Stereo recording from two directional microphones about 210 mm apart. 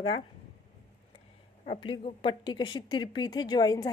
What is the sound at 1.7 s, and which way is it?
Speech, 25° left (ahead or behind).